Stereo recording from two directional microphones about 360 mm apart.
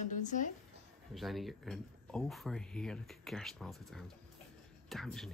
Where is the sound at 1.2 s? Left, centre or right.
Centre.